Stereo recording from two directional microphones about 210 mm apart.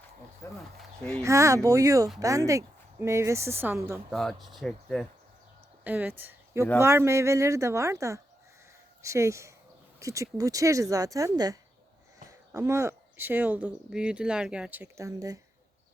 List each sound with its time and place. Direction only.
0.4 s speech: 10° left (ahead or behind)
1.2 s speech: 15° right (ahead or behind)
4.1 s speech: centre (ahead or behind)
5.8 s speech: 10° right (ahead or behind)
12.3 s speech: 15° right (ahead or behind)